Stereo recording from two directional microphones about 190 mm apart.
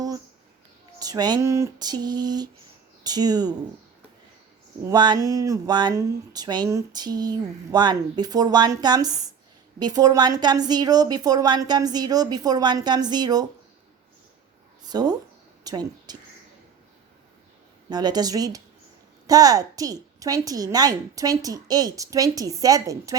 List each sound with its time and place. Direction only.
0.9 s speech: 20° right (ahead or behind)
4.9 s speech: 20° right (ahead or behind)
14.8 s a woman's voice: 20° right (ahead or behind)
17.8 s speech: 20° right (ahead or behind)